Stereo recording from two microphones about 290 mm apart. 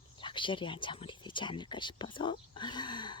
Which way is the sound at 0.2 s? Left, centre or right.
Centre.